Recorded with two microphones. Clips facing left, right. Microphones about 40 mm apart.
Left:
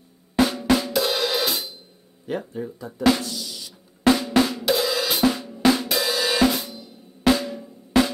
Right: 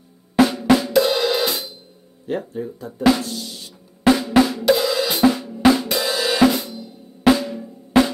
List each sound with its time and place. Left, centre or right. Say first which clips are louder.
0.4 s cymbal: right 4 dB; centre
3.2 s drum: right 3 dB; right
4.0 s drum kit: right 3 dB; centre
6.5 s cymbal: right 4 dB; centre
7.2 s drum: right 4 dB; centre
7.9 s drum: right 4 dB; right